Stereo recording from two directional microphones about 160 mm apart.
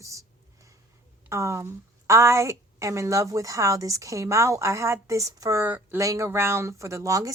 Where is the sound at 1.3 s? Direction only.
20° right (ahead or behind).